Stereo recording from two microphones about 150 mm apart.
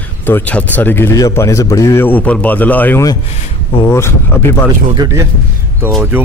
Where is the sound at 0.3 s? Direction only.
10° left (ahead or behind).